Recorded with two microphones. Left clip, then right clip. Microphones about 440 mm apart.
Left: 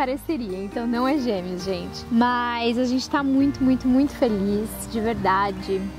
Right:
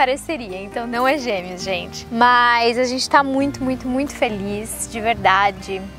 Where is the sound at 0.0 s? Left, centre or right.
Right.